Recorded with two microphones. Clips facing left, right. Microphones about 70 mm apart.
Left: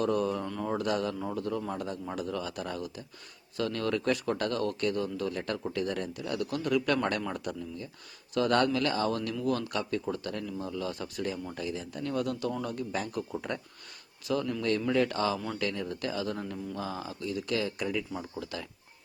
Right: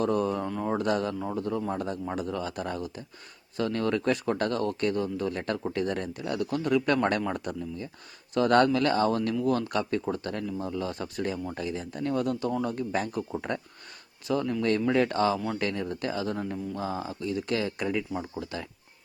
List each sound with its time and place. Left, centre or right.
0.0 s speech: right
0.4 s a sound: centre
0.8 s speech: right
13.1 s speech: right
18.1 s speech: right